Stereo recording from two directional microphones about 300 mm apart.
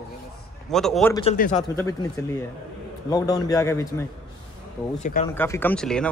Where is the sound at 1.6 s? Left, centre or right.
Centre.